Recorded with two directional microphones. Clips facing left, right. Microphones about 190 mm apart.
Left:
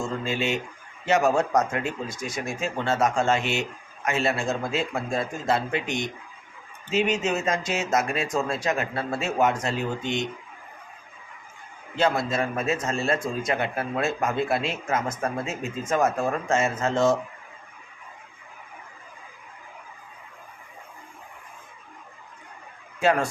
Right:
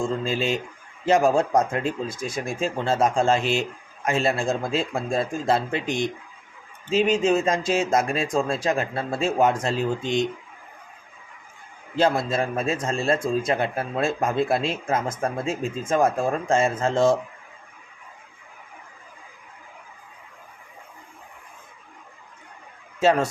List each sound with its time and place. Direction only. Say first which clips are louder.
0.0 s a man's voice: right 3 dB; 35° right (ahead or behind)
11.9 s a man's voice: right 2 dB; 35° right (ahead or behind)
23.0 s speech: right 3 dB; 25° right (ahead or behind)